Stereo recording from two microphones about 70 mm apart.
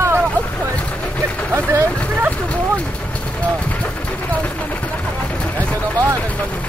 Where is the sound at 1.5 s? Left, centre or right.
Right.